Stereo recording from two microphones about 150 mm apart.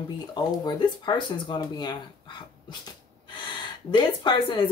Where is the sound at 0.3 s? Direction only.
30° left (ahead or behind).